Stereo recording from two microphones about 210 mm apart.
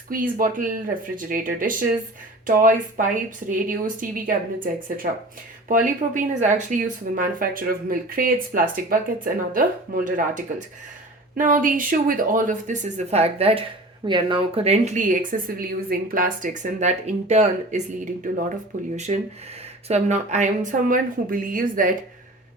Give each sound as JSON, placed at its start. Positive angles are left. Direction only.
{"t": 0.1, "sound": "speech", "side_deg": -40}